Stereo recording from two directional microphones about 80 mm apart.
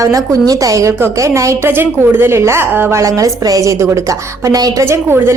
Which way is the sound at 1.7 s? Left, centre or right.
Right.